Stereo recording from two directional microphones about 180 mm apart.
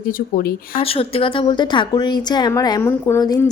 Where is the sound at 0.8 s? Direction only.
30° left (ahead or behind).